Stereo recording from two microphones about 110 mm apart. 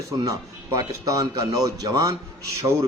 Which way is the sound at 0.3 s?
30° right (ahead or behind).